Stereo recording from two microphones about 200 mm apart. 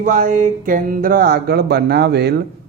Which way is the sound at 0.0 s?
40° right (ahead or behind).